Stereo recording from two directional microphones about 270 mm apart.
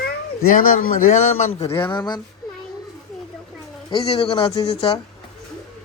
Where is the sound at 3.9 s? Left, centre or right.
Left.